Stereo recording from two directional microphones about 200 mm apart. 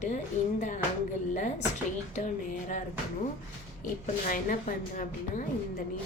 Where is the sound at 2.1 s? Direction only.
35° left (ahead or behind).